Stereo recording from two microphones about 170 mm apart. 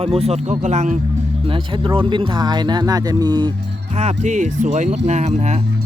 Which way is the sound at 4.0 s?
40° right (ahead or behind).